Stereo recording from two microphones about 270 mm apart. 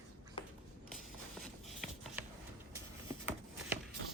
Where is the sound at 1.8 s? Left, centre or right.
Centre.